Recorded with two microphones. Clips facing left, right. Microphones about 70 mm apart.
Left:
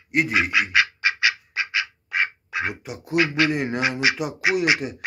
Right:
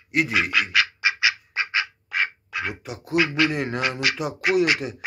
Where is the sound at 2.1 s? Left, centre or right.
Centre.